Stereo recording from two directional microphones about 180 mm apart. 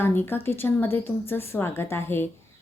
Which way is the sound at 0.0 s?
10° left (ahead or behind).